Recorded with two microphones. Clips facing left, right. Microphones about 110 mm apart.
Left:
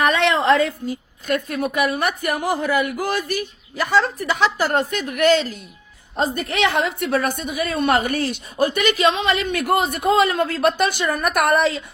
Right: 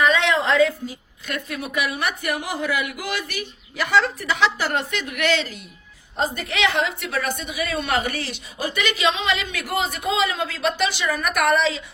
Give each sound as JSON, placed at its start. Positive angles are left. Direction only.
{"t": 0.0, "sound": "a woman's voice", "side_deg": 60}